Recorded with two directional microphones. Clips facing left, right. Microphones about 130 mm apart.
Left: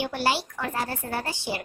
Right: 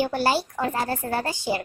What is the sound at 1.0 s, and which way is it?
Speech, 50° right (ahead or behind).